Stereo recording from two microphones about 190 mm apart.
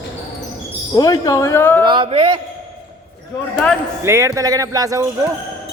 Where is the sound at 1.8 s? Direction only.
25° right (ahead or behind).